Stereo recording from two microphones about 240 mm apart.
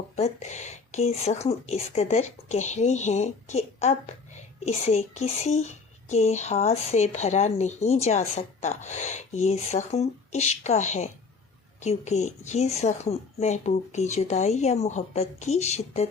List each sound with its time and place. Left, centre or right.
0.2 s a child's voice: left